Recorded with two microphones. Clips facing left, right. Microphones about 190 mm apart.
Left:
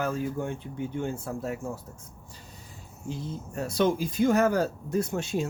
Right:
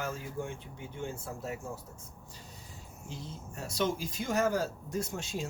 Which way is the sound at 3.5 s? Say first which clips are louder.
Left 7 dB; 60° left (ahead or behind).